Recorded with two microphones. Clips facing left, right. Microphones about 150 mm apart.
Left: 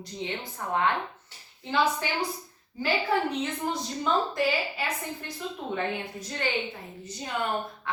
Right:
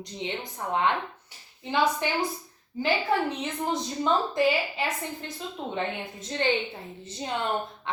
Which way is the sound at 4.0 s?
20° right (ahead or behind).